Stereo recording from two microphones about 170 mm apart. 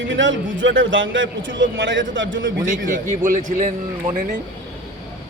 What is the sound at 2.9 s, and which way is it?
Speech, 50° right (ahead or behind).